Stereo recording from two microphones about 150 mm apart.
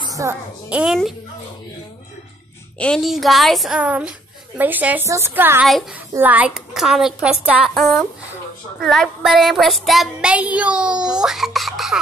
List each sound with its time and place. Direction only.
0.0 s music: 20° right (ahead or behind)
0.7 s a woman's voice: 10° right (ahead or behind)
2.8 s child singing: centre (ahead or behind)
4.6 s a woman's voice: 10° right (ahead or behind)
6.1 s child singing: 10° right (ahead or behind)